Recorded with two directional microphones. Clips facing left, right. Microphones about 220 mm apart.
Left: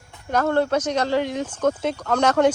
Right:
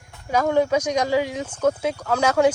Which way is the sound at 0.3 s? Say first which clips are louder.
Right 1 dB; 10° right (ahead or behind).